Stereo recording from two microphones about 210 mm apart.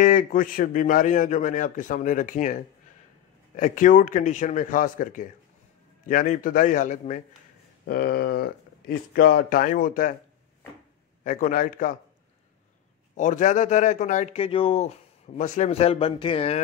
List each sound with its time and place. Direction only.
0.0 s a man's voice: 40° left (ahead or behind)
7.8 s speech: 45° left (ahead or behind)
11.2 s a man's voice: 40° left (ahead or behind)
13.1 s a man's voice: 35° left (ahead or behind)